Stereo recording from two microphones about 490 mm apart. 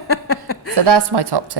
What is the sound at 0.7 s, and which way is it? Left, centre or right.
Speech, right.